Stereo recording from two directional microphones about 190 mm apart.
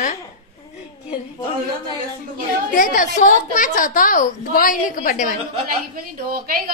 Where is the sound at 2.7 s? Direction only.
45° left (ahead or behind).